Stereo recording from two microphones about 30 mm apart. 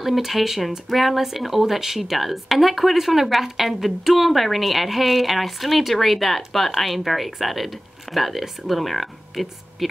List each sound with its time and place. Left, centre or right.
0.0 s speech: centre